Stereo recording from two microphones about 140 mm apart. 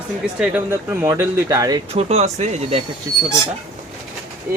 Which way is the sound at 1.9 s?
50° right (ahead or behind).